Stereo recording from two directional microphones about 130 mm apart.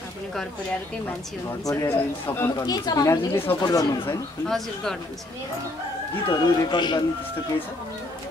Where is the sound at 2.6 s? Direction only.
30° left (ahead or behind).